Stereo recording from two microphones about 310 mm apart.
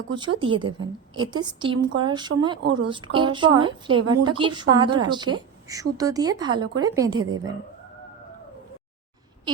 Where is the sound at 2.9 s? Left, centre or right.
Centre.